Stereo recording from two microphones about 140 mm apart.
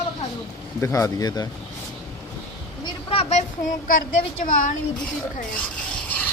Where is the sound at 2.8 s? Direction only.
40° left (ahead or behind).